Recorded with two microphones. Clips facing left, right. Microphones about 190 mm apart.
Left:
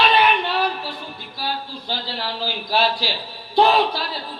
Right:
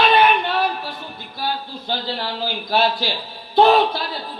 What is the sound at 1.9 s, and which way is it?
A woman's voice, 50° right (ahead or behind).